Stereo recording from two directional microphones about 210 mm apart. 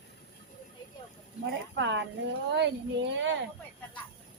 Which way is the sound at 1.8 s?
60° right (ahead or behind).